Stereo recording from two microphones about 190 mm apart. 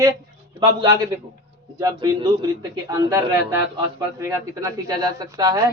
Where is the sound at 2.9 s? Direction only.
15° right (ahead or behind).